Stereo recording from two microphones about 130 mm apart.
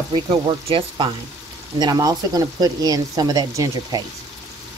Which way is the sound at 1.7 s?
30° right (ahead or behind).